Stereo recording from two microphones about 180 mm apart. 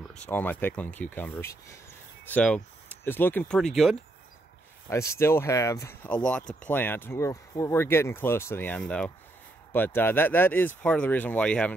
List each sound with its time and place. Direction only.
0.3 s speech: 10° left (ahead or behind)
4.8 s speech: 15° left (ahead or behind)